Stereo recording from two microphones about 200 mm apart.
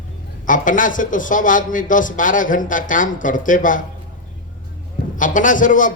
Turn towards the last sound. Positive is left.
turn(degrees=40)  # may be behind; listen again after turning